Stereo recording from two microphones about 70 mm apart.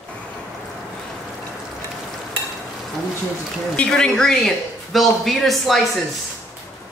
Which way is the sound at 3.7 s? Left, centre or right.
Centre.